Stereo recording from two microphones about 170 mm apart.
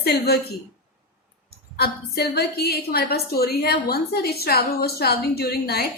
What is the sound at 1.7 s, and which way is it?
A woman's voice, 70° left (ahead or behind).